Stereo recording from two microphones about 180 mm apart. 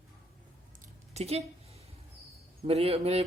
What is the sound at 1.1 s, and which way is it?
Speech, 35° right (ahead or behind).